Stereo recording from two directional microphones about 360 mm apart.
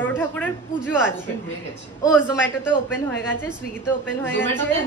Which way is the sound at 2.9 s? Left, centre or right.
Centre.